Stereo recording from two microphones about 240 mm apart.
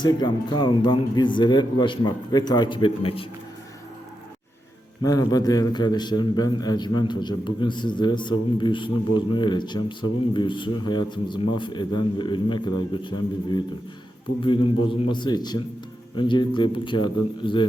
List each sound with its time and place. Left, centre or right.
0.0 s speech: centre
5.0 s a man's voice: centre